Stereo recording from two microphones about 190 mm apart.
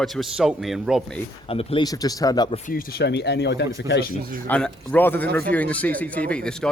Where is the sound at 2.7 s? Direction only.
50° left (ahead or behind).